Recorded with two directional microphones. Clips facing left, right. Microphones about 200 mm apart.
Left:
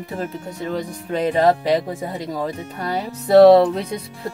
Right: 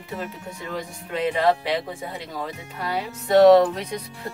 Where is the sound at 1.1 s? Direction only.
40° left (ahead or behind).